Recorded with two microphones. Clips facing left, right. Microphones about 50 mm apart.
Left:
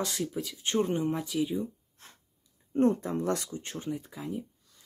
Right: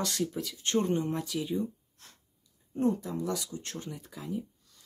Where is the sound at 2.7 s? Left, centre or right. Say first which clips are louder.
Left 4 dB; left.